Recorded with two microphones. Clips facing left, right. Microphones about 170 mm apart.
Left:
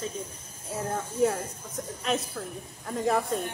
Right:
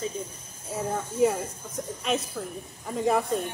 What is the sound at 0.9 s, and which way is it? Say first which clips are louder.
Speech: right 2 dB; 5° right (ahead or behind).